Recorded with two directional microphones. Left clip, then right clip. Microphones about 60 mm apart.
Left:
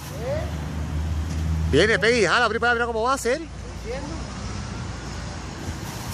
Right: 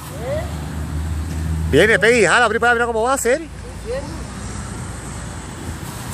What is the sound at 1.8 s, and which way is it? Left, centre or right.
Speech, right.